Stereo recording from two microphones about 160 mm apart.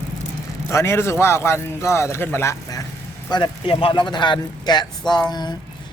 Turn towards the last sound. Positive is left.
turn(degrees=25)  # may be behind; listen again after turning